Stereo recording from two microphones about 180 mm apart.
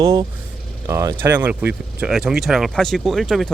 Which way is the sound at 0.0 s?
20° right (ahead or behind).